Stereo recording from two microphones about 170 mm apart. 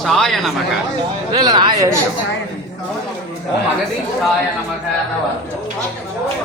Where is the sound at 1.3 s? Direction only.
25° right (ahead or behind).